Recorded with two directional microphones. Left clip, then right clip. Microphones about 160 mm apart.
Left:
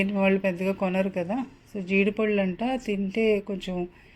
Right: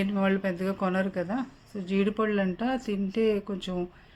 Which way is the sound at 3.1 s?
55° right (ahead or behind).